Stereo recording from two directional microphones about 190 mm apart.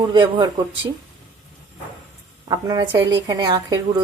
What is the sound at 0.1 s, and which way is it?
Speech, 25° right (ahead or behind).